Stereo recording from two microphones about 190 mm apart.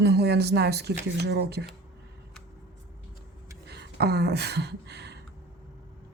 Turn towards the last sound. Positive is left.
turn(degrees=-60)  # may be behind; listen again after turning